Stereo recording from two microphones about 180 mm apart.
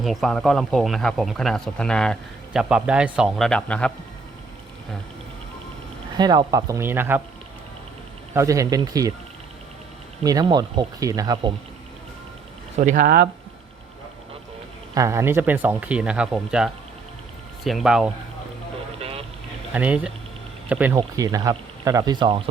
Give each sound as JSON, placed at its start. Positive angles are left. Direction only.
{"t": 0.0, "sound": "speech", "side_deg": 0}
{"t": 6.1, "sound": "speech", "side_deg": -20}
{"t": 8.3, "sound": "speech", "side_deg": -15}
{"t": 10.4, "sound": "speech", "side_deg": -25}
{"t": 12.7, "sound": "speech", "side_deg": -45}
{"t": 14.9, "sound": "speech", "side_deg": -15}
{"t": 18.9, "sound": "vehicle", "side_deg": -35}
{"t": 19.7, "sound": "speech", "side_deg": -5}